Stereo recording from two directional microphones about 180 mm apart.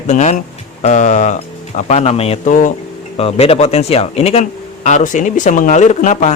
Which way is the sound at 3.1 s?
35° left (ahead or behind).